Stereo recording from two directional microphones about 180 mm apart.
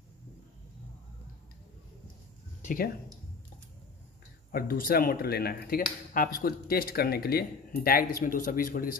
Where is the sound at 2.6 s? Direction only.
45° left (ahead or behind).